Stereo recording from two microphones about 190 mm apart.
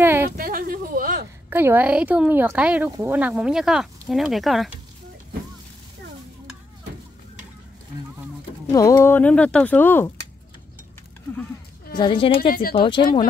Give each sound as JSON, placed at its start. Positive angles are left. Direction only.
{"t": 0.0, "sound": "a sound", "side_deg": -10}
{"t": 0.4, "sound": "a sound", "side_deg": -50}
{"t": 1.5, "sound": "a woman's voice", "side_deg": -10}
{"t": 8.6, "sound": "speech", "side_deg": 15}
{"t": 12.0, "sound": "a woman's voice", "side_deg": 30}
{"t": 12.4, "sound": "speech", "side_deg": 50}
{"t": 12.7, "sound": "a woman's voice", "side_deg": 25}